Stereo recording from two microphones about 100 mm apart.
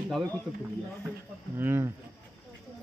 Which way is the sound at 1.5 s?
25° right (ahead or behind).